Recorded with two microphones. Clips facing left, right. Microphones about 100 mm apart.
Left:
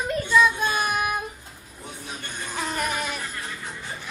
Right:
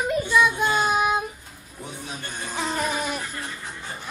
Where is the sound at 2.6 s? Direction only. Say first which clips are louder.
Right 2 dB; 20° right (ahead or behind).